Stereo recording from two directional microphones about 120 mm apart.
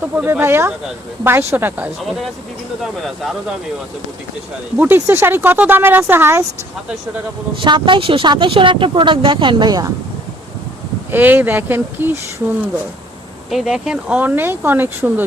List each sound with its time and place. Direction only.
0.0 s speech: 15° right (ahead or behind)
2.0 s speech: centre (ahead or behind)
4.8 s speech: 20° right (ahead or behind)
7.6 s speech: 45° right (ahead or behind)
11.1 s speech: 15° right (ahead or behind)
13.5 s speech: 5° right (ahead or behind)